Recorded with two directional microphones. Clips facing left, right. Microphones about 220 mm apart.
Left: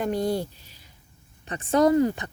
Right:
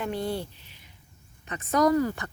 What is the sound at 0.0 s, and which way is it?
Speech, 40° left (ahead or behind).